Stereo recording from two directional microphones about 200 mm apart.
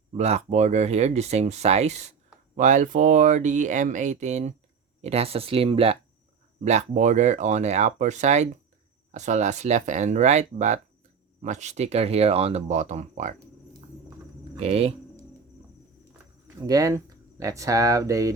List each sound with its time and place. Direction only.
0.1 s speech: 30° right (ahead or behind)
14.5 s speech: 30° right (ahead or behind)
16.6 s speech: 15° right (ahead or behind)